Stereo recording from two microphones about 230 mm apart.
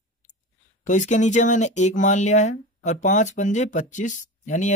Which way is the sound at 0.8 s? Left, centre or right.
Left.